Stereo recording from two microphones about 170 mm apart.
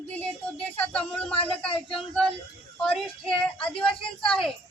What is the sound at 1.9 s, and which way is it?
Speech, 5° left (ahead or behind).